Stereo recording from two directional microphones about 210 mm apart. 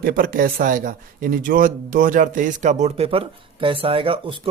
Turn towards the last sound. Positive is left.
turn(degrees=-25)  # may be behind; listen again after turning